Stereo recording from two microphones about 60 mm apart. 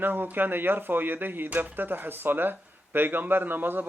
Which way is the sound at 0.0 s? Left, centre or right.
Right.